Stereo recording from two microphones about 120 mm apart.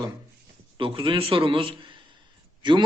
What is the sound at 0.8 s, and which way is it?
Speech, 45° right (ahead or behind).